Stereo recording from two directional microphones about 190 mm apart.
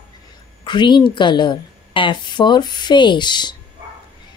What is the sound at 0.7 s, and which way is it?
A woman's voice, 25° left (ahead or behind).